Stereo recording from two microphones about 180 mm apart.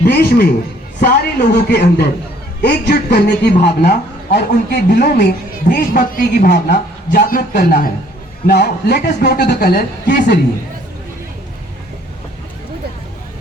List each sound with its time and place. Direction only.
0.0 s a man's voice: 60° left (ahead or behind)
5.6 s a man's voice: 50° left (ahead or behind); by 10.4 s 65° left (ahead or behind)